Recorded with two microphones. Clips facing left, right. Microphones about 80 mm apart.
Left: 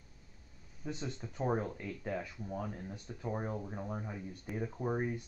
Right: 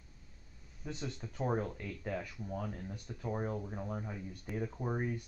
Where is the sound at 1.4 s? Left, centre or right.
Centre.